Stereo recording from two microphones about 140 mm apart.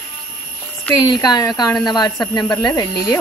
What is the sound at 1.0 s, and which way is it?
Speech, 30° left (ahead or behind).